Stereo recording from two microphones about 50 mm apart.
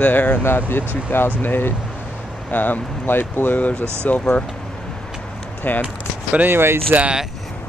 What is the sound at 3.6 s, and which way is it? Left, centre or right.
Speech, left.